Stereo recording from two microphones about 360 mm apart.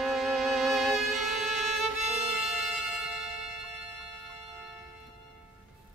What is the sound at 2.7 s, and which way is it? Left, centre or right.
Music, centre.